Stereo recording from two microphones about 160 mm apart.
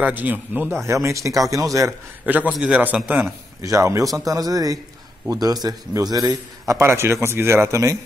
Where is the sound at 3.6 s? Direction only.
20° right (ahead or behind).